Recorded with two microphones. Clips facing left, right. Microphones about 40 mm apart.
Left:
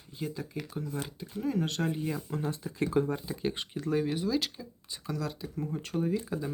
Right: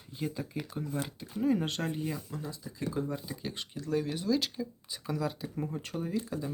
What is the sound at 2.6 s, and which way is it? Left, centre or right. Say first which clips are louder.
Speech: left 6 dB; left.